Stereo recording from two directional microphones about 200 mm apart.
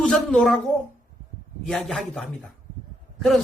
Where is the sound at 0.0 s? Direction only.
5° left (ahead or behind).